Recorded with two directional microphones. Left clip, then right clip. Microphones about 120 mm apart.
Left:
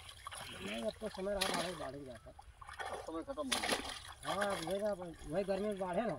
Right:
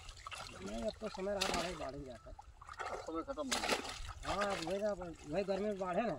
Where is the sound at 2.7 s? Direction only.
50° right (ahead or behind).